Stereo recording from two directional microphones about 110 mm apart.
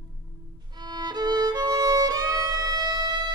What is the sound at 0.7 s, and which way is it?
Violin, 40° right (ahead or behind).